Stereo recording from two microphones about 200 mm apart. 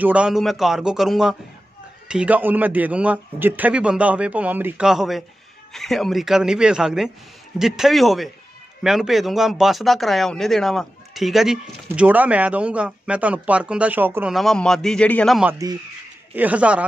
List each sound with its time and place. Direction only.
0.0 s a man's voice: 5° right (ahead or behind)
15.5 s a man's voice: 20° right (ahead or behind)
16.3 s a man's voice: 5° right (ahead or behind)